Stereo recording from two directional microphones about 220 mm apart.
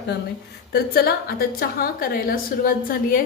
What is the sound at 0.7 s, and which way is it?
A woman's voice, 45° left (ahead or behind).